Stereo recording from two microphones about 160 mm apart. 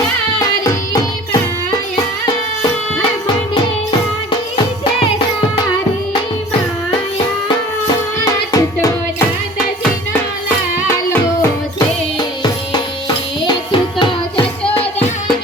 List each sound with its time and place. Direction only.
4.3 s music: 30° left (ahead or behind)
8.2 s music: 20° left (ahead or behind)
12.4 s music: 30° left (ahead or behind)